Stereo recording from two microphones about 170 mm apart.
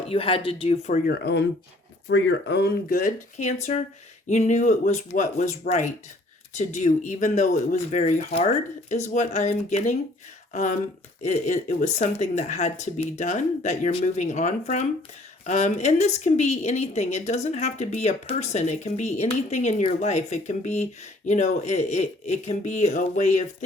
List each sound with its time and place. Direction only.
0.1 s speech: 35° left (ahead or behind)
1.0 s speech: 70° left (ahead or behind); by 23.6 s 45° left (ahead or behind)